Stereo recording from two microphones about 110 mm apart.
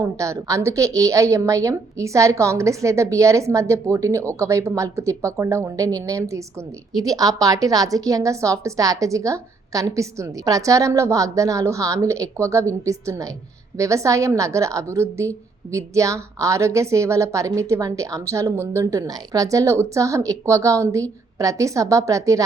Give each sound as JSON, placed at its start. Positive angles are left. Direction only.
{"t": 0.0, "sound": "a woman's voice", "side_deg": -30}